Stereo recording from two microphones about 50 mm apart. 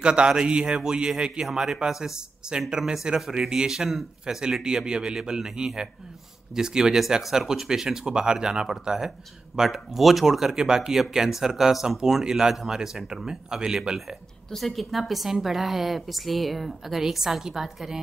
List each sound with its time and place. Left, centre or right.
0.0 s speech: centre
14.5 s a woman's voice: centre